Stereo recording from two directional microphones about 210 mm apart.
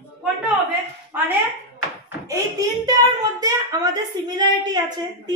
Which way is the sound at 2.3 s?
15° right (ahead or behind).